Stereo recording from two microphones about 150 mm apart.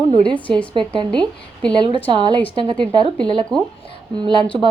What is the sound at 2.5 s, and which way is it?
Speech, 30° right (ahead or behind).